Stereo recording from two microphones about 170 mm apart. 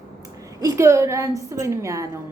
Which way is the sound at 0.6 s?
20° right (ahead or behind).